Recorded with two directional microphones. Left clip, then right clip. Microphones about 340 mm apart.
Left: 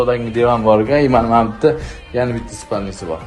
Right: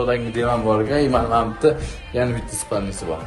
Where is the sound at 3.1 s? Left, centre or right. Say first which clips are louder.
Left 3 dB; centre.